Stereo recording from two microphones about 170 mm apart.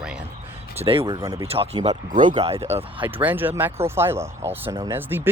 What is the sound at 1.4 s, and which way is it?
Speech, 35° right (ahead or behind).